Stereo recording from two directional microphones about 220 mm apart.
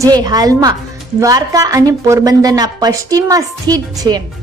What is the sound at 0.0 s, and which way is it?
Speech, 15° right (ahead or behind).